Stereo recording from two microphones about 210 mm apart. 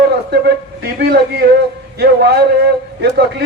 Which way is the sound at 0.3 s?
50° right (ahead or behind).